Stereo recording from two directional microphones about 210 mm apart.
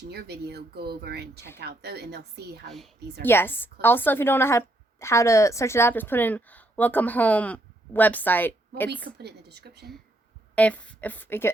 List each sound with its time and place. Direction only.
0.1 s speech: 50° right (ahead or behind)
2.6 s a woman's voice: centre (ahead or behind)
9.0 s speech: 50° right (ahead or behind)
10.5 s a woman's voice: 5° left (ahead or behind)